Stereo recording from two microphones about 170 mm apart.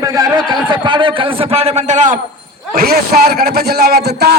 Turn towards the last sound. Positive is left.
turn(degrees=-70)  # may be behind; listen again after turning